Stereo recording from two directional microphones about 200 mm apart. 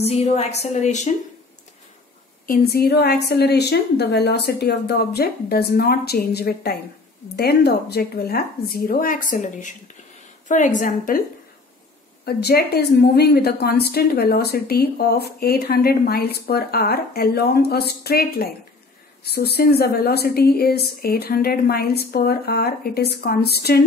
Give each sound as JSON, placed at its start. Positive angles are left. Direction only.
{"t": 0.0, "sound": "a woman's voice", "side_deg": 30}
{"t": 2.4, "sound": "a woman's voice", "side_deg": 50}
{"t": 12.3, "sound": "a woman's voice", "side_deg": 55}